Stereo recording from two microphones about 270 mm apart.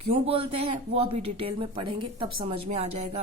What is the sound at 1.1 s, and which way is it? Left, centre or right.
Speech, right.